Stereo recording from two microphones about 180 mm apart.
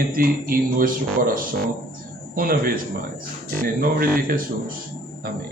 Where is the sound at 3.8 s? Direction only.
55° right (ahead or behind).